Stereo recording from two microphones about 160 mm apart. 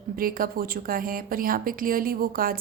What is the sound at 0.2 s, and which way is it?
A woman's voice, 65° right (ahead or behind).